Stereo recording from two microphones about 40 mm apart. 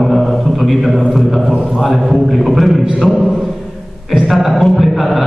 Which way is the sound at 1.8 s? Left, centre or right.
Centre.